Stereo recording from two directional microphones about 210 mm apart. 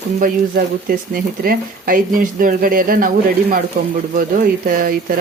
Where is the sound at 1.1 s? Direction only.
45° right (ahead or behind).